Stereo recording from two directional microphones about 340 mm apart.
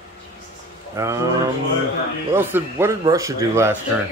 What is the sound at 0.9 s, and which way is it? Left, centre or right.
Speech, centre.